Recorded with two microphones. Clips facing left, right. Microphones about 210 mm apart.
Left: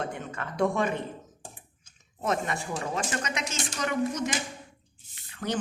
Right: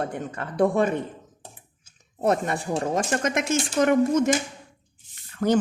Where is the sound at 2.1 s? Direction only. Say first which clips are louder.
Right 6 dB; 40° right (ahead or behind).